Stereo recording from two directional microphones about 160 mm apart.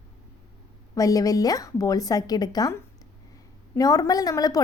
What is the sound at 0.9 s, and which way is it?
A woman's voice, 20° left (ahead or behind).